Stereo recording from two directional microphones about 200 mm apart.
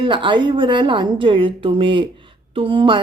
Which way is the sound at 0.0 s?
25° right (ahead or behind).